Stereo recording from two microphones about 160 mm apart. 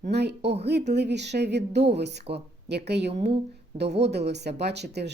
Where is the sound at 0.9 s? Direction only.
90° right.